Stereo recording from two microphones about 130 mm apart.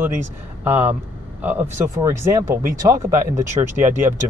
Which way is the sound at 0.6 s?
15° right (ahead or behind).